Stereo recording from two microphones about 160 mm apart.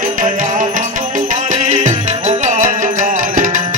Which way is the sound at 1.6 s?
45° right (ahead or behind).